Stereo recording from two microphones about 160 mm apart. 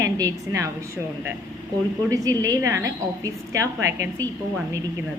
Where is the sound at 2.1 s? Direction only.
20° right (ahead or behind).